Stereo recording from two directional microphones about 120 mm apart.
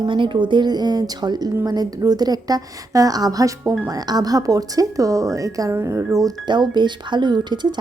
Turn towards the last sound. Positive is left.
turn(degrees=-40)  # may be behind; listen again after turning